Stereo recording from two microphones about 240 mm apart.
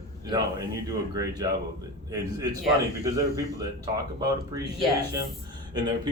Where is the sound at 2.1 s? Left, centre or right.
Centre.